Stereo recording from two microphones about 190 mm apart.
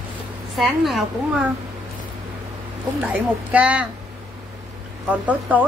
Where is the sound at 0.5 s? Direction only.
Centre (ahead or behind).